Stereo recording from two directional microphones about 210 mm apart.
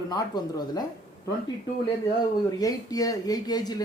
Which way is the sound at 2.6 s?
15° left (ahead or behind).